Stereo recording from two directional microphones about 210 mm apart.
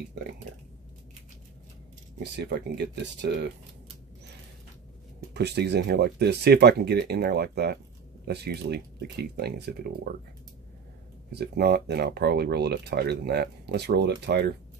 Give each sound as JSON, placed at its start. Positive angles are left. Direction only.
{"t": 0.2, "sound": "speech", "side_deg": -55}
{"t": 2.1, "sound": "speech", "side_deg": -55}
{"t": 5.3, "sound": "speech", "side_deg": -50}
{"t": 11.3, "sound": "speech", "side_deg": -50}